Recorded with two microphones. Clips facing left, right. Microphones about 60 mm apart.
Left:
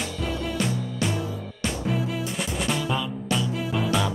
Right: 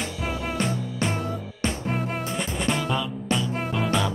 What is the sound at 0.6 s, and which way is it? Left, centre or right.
Music, right.